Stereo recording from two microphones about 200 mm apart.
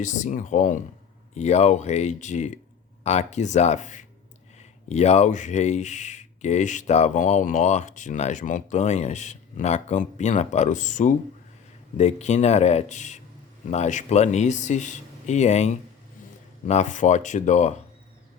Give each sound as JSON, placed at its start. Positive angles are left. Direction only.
{"t": 0.0, "sound": "speech", "side_deg": 40}